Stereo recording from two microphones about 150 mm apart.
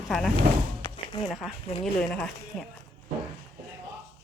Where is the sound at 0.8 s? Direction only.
30° left (ahead or behind).